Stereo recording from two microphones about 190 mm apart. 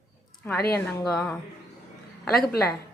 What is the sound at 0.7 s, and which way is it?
A woman's voice, 5° left (ahead or behind).